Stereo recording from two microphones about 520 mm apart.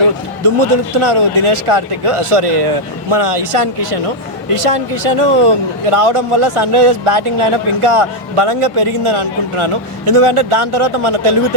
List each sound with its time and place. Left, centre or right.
1.0 s a man's voice: right